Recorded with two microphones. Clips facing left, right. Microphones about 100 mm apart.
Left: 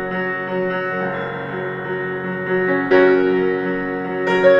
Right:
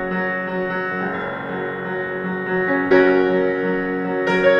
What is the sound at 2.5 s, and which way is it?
Music, centre (ahead or behind).